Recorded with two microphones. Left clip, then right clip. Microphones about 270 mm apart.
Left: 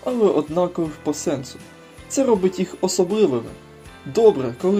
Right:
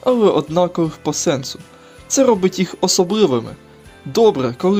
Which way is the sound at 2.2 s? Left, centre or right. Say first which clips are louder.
Right 4 dB; right.